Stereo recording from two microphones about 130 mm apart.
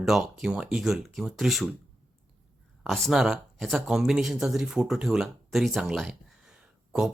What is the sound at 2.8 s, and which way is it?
Speech, centre (ahead or behind).